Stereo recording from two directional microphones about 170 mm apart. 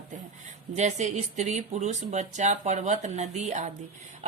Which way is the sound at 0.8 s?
45° right (ahead or behind).